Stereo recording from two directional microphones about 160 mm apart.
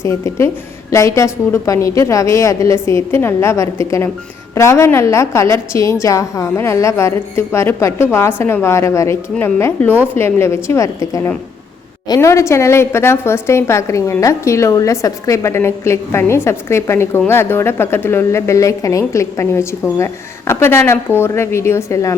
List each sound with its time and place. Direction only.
0.0 s a woman's voice: 15° left (ahead or behind)